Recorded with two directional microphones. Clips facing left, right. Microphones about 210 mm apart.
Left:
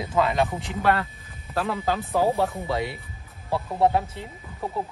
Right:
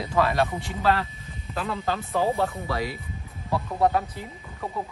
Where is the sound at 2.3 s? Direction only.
Centre (ahead or behind).